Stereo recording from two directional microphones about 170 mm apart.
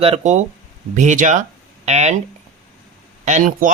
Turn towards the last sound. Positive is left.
turn(degrees=-50)  # may be behind; listen again after turning